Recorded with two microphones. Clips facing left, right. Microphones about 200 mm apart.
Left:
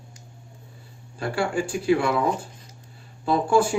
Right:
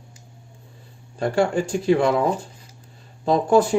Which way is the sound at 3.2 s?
40° right (ahead or behind).